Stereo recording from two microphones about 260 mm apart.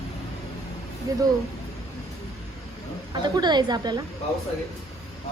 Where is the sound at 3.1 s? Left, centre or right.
Centre.